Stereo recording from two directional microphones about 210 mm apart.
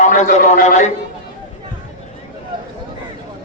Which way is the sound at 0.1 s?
40° left (ahead or behind).